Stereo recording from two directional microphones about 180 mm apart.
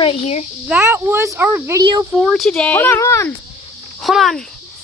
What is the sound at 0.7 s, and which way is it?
Speech, 15° right (ahead or behind).